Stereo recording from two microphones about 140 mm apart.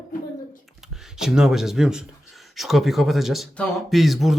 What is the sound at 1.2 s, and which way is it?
Speech, 5° right (ahead or behind).